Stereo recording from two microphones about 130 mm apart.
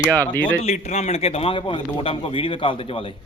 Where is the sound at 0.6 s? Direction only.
60° left (ahead or behind); by 3.2 s 40° left (ahead or behind).